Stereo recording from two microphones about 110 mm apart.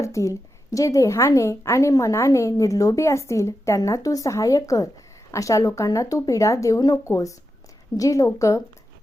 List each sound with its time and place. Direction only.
0.0 s a woman's voice: 30° left (ahead or behind)